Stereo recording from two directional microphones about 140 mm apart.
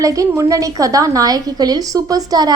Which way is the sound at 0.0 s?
25° right (ahead or behind).